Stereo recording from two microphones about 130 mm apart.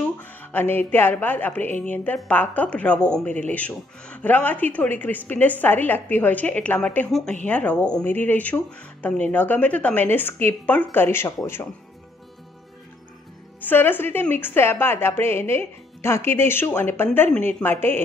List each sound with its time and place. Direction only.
0.0 s a woman's voice: 15° left (ahead or behind)
7.1 s a woman's voice: centre (ahead or behind); by 11.3 s 20° left (ahead or behind)
13.6 s a woman's voice: 15° left (ahead or behind)